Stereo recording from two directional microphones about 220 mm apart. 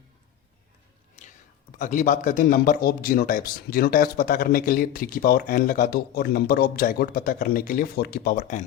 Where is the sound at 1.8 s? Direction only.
40° left (ahead or behind).